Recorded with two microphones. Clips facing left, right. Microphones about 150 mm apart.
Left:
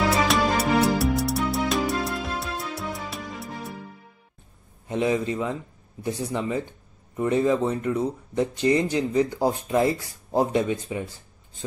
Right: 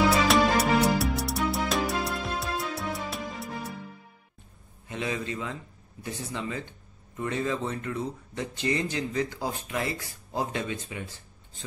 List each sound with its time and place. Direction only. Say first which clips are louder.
0.0 s music: even; centre (ahead or behind)
4.8 s a man's voice: left 8 dB; 25° left (ahead or behind)
7.9 s speech: left 7 dB; 30° left (ahead or behind)